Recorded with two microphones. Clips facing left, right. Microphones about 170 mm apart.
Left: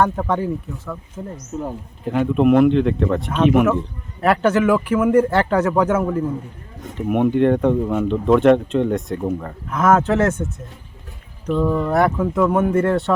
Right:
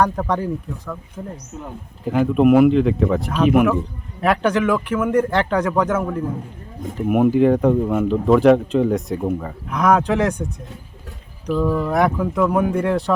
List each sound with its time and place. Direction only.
0.0 s speech: centre (ahead or behind)
1.5 s speech: 45° left (ahead or behind)
2.0 s speech: centre (ahead or behind)